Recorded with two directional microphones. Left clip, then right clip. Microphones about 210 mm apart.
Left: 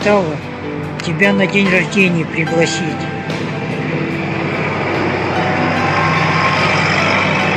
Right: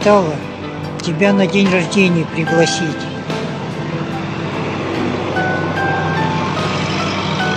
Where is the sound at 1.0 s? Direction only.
20° right (ahead or behind).